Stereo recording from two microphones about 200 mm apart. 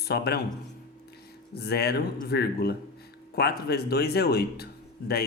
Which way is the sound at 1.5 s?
55° left (ahead or behind).